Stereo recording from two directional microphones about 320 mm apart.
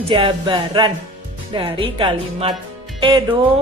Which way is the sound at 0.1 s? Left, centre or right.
Centre.